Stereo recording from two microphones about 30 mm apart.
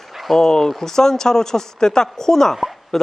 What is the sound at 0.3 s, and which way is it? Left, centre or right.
Speech, centre.